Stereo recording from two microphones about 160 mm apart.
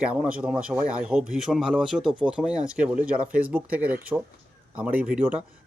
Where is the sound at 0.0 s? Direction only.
5° right (ahead or behind).